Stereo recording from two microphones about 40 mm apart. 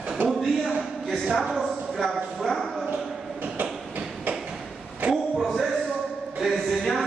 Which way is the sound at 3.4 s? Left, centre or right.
Right.